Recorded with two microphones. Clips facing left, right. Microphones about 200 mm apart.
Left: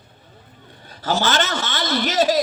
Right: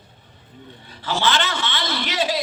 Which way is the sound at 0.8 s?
45° left (ahead or behind).